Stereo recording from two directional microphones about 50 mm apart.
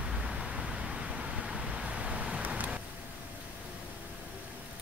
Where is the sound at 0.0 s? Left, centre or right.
Centre.